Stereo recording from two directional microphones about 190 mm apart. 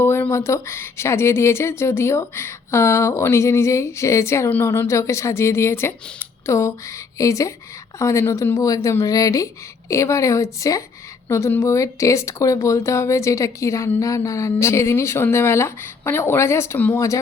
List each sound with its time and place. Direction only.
0.0 s speech: 15° left (ahead or behind)